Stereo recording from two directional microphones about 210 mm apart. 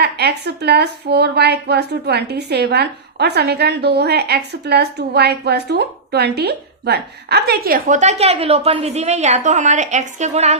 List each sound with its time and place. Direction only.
0.0 s speech: 50° right (ahead or behind); by 10.6 s 30° right (ahead or behind)